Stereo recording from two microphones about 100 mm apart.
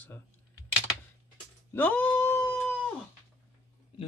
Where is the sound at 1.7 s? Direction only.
15° left (ahead or behind).